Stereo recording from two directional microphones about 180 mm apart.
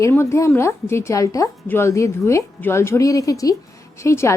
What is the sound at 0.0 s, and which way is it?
A woman's voice, 15° left (ahead or behind).